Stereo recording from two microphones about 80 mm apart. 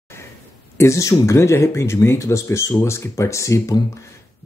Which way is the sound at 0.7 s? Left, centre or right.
Left.